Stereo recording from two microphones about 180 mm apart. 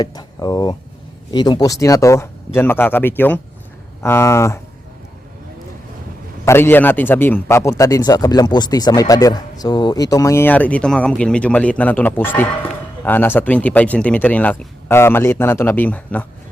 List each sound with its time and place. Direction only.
0.0 s a man's voice: 20° left (ahead or behind)
6.4 s a man's voice: 15° left (ahead or behind)